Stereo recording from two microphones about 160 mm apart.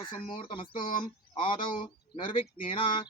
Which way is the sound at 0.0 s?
30° left (ahead or behind).